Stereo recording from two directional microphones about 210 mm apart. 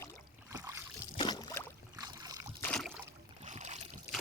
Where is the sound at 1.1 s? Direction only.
20° left (ahead or behind).